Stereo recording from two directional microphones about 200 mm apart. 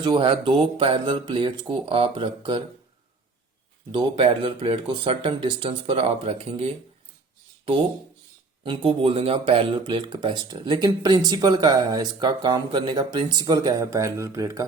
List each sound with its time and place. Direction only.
0.0 s speech: 25° right (ahead or behind)
4.1 s speech: 25° right (ahead or behind)
8.6 s speech: 25° right (ahead or behind)